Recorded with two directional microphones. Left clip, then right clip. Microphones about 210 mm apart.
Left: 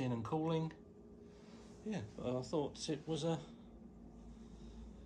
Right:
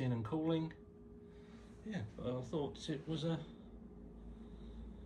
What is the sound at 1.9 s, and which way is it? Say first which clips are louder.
Speech: left 2 dB; 10° left (ahead or behind).